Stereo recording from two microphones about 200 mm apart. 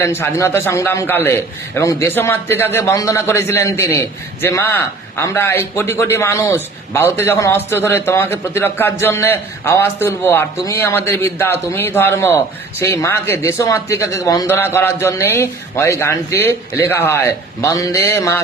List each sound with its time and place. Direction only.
0.0 s a man's voice: 15° left (ahead or behind)